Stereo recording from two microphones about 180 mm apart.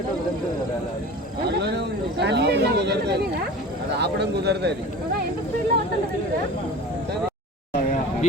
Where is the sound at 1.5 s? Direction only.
70° right (ahead or behind).